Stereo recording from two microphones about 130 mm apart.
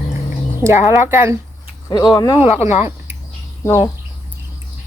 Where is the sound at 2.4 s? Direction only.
55° left (ahead or behind).